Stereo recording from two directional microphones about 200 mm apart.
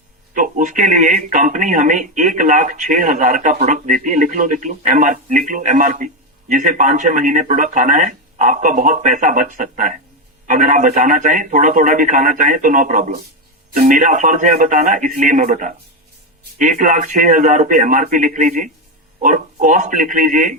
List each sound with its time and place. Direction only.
0.3 s speech: 40° right (ahead or behind)